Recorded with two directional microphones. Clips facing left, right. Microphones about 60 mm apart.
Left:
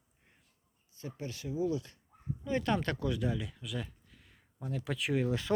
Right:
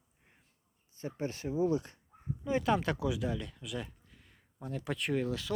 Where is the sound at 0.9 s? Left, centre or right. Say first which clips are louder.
Right 5 dB; right.